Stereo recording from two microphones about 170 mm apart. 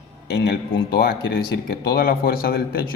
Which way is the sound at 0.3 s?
70° left (ahead or behind).